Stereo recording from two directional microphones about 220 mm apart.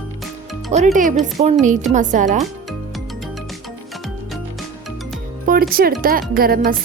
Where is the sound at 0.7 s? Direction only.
35° right (ahead or behind).